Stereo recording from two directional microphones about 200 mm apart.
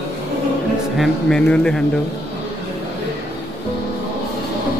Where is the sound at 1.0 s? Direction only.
5° left (ahead or behind).